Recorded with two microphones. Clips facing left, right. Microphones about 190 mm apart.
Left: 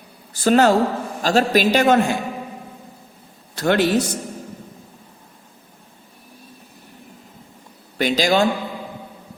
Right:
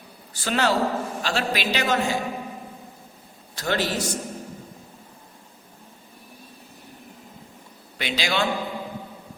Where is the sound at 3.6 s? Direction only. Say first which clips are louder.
Left 8 dB; 60° left (ahead or behind).